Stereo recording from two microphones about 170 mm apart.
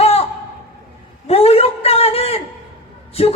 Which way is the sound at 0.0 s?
35° left (ahead or behind).